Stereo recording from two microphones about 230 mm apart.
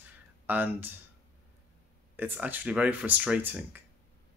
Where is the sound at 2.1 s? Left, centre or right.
Centre.